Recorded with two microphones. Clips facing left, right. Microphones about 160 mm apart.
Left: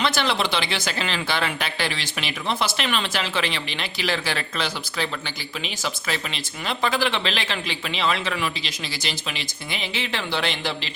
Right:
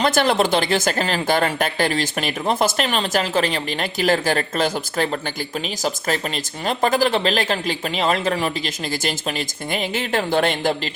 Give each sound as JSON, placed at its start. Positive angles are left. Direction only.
{"t": 0.0, "sound": "speech", "side_deg": -45}